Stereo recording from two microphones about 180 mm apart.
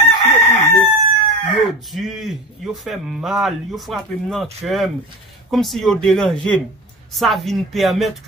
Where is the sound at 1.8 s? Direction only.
Centre (ahead or behind).